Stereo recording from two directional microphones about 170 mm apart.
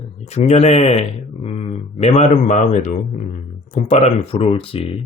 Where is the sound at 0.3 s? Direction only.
40° left (ahead or behind).